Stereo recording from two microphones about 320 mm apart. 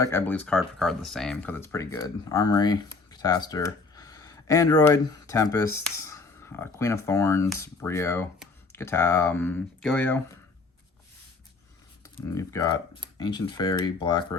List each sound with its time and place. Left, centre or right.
0.0 s speech: centre
12.0 s speech: centre